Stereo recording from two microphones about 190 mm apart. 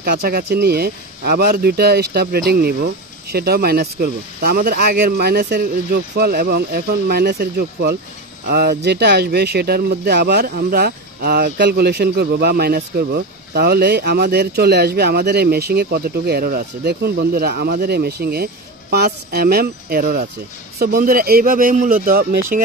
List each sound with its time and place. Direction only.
0.0 s a man's voice: 55° right (ahead or behind)